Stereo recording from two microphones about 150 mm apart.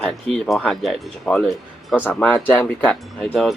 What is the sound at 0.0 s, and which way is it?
Speech, 5° left (ahead or behind).